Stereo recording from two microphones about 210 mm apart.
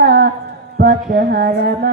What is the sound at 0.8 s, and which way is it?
Music, 45° right (ahead or behind).